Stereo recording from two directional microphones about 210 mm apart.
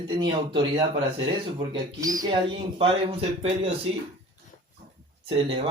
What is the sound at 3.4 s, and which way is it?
Speech, 30° right (ahead or behind).